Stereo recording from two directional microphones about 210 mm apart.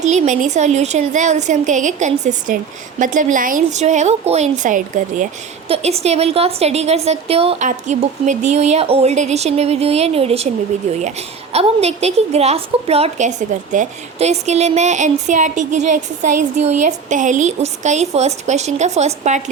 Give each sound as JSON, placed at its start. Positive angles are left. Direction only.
{"t": 0.0, "sound": "a woman's voice", "side_deg": -35}